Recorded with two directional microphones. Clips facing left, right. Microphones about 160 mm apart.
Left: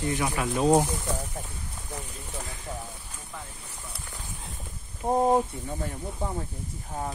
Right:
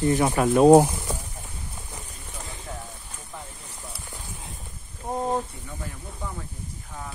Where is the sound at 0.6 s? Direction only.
60° right (ahead or behind).